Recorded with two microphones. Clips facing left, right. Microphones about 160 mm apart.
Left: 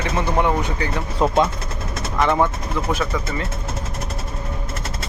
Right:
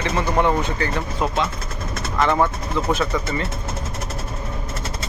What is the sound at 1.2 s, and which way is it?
Speech, 35° left (ahead or behind).